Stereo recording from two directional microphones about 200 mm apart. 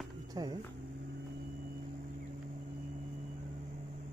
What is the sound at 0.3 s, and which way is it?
Speech, 20° right (ahead or behind).